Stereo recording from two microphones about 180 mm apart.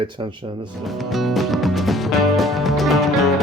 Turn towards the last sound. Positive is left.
turn(degrees=0)  # may be behind; listen again after turning